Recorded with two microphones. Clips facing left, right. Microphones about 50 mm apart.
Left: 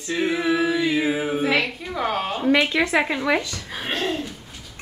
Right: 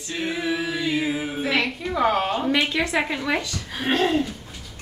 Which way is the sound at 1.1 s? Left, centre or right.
Left.